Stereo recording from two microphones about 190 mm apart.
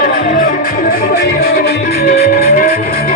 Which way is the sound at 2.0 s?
55° left (ahead or behind).